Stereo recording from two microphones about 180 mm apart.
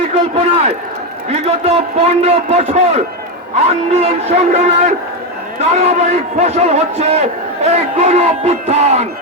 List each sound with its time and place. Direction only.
0.1 s a man's voice: 35° right (ahead or behind)